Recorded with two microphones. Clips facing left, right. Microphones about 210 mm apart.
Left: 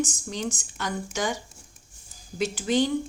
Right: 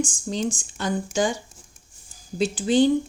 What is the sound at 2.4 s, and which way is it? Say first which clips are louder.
Speech: right 5 dB; 30° right (ahead or behind).